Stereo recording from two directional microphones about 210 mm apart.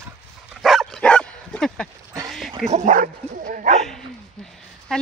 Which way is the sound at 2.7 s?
35° right (ahead or behind).